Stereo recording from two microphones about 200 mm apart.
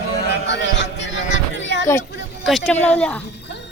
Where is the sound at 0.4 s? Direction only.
60° left (ahead or behind).